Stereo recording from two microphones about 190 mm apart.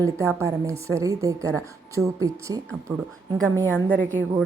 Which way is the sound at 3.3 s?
10° left (ahead or behind).